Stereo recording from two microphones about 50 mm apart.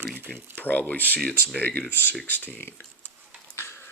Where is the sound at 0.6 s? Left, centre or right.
Left.